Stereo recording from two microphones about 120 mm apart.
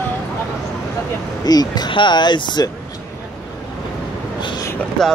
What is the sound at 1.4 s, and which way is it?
Speech, 35° left (ahead or behind).